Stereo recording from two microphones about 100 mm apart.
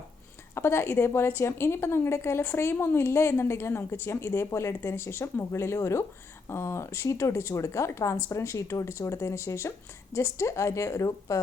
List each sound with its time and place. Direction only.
0.5 s a woman's voice: 25° left (ahead or behind)